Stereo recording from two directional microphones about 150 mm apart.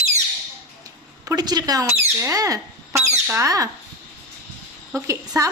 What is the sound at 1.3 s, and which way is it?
Speech, 25° right (ahead or behind).